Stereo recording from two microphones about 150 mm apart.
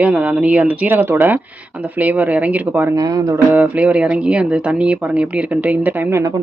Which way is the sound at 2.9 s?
25° right (ahead or behind).